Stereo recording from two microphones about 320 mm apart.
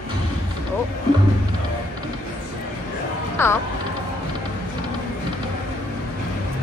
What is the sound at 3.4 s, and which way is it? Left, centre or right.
Speech, centre.